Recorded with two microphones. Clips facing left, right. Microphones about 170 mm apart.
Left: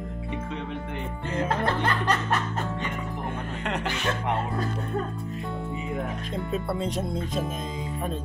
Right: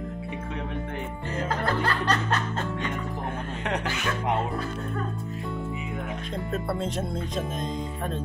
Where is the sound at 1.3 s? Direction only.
25° left (ahead or behind).